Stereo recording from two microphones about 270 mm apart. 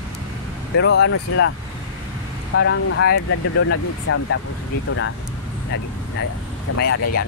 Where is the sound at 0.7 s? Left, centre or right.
Left.